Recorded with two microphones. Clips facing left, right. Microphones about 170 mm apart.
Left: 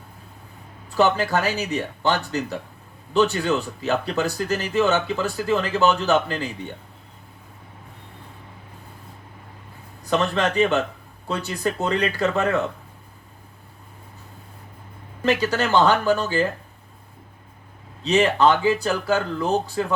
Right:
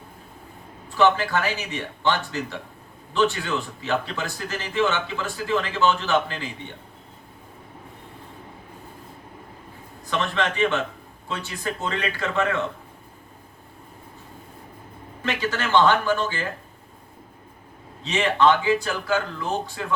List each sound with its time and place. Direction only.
0.9 s speech: 40° left (ahead or behind)
10.1 s speech: 40° left (ahead or behind)
15.2 s speech: 40° left (ahead or behind)
18.0 s speech: 40° left (ahead or behind)